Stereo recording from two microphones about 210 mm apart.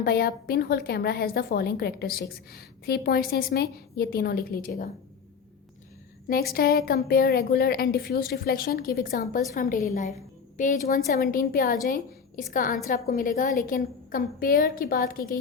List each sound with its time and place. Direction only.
0.0 s a woman's voice: 45° left (ahead or behind)
6.2 s a woman's voice: 45° left (ahead or behind)